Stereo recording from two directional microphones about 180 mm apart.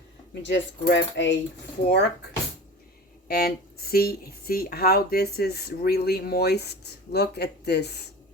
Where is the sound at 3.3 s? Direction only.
60° left (ahead or behind).